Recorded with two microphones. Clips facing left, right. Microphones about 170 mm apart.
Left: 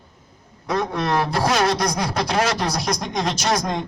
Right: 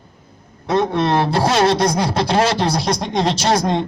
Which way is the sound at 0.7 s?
25° right (ahead or behind).